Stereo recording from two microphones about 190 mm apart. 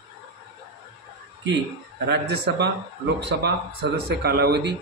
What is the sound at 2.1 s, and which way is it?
A man's voice, 60° right (ahead or behind).